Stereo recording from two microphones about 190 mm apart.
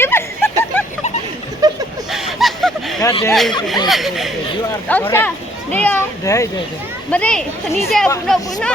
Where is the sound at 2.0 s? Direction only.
Centre (ahead or behind).